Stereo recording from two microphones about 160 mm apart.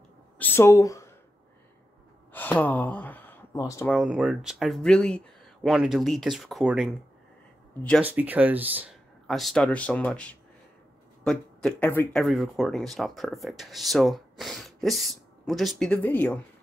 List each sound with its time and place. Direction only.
0.4 s speech: 15° left (ahead or behind)
2.3 s a sound: 10° left (ahead or behind)
3.9 s speech: centre (ahead or behind)
8.0 s speech: 10° right (ahead or behind)
9.3 s speech: centre (ahead or behind)
12.2 s speech: centre (ahead or behind)